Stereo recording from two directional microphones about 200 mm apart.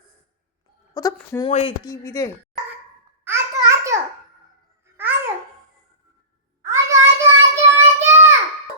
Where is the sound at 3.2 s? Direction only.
15° right (ahead or behind).